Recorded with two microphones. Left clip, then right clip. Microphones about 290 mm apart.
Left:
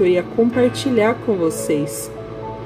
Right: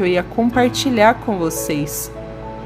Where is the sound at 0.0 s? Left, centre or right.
Right.